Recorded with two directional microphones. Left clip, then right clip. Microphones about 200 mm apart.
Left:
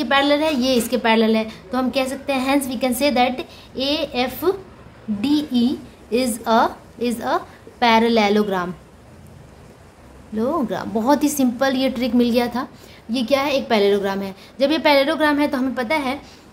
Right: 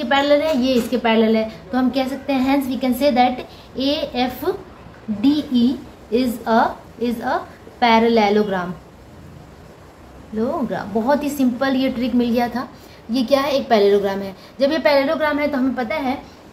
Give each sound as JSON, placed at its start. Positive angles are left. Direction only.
{"t": 0.1, "sound": "a woman's voice", "side_deg": 40}
{"t": 10.3, "sound": "a woman's voice", "side_deg": 40}
{"t": 13.1, "sound": "a woman's voice", "side_deg": 20}